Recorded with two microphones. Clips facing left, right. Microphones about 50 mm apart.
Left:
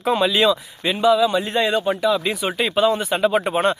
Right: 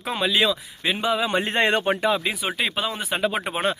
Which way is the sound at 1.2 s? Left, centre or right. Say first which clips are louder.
Left 3 dB; right.